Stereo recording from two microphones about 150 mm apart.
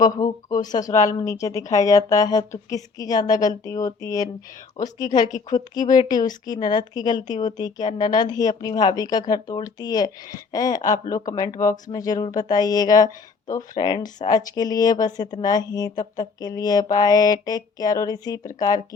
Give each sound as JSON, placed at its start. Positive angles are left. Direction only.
{"t": 0.0, "sound": "speech", "side_deg": 25}